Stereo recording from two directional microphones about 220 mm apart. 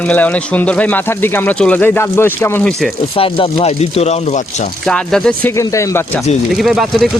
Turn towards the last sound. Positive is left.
turn(degrees=0)  # may be behind; listen again after turning